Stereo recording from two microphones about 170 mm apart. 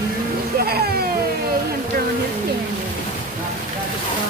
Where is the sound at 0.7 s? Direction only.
65° right (ahead or behind).